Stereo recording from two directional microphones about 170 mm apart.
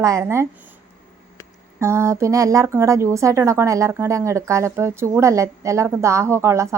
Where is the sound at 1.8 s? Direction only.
15° right (ahead or behind).